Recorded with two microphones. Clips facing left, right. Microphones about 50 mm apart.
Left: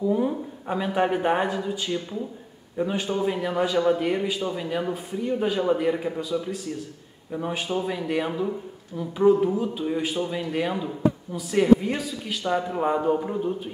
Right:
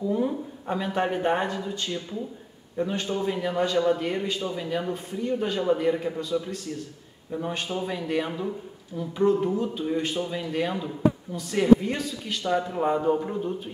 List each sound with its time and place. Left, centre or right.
0.0 s a man's voice: centre